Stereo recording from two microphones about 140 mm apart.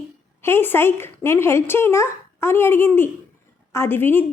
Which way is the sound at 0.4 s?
15° left (ahead or behind).